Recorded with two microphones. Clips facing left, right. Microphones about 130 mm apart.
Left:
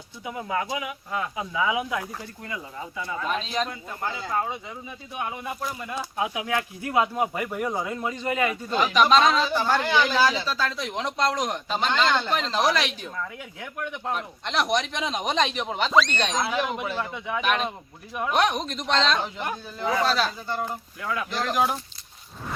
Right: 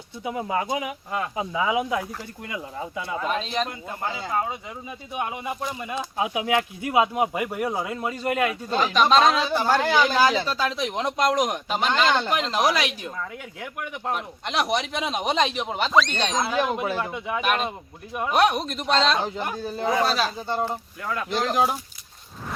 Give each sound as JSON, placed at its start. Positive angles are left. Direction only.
{"t": 0.3, "sound": "speech", "side_deg": -25}
{"t": 3.2, "sound": "speech", "side_deg": 0}
{"t": 9.6, "sound": "speech", "side_deg": -10}
{"t": 9.8, "sound": "speech", "side_deg": -40}
{"t": 10.6, "sound": "speech", "side_deg": -15}
{"t": 19.5, "sound": "speech", "side_deg": -35}
{"t": 19.9, "sound": "speech", "side_deg": -10}
{"t": 20.5, "sound": "speech", "side_deg": -25}
{"t": 21.0, "sound": "speech", "side_deg": 0}
{"t": 21.2, "sound": "speech", "side_deg": -25}